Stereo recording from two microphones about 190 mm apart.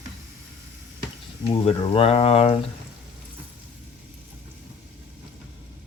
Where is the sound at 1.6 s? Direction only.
30° left (ahead or behind).